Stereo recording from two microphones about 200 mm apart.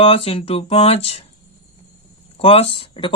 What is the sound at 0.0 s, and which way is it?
Speech, 30° left (ahead or behind).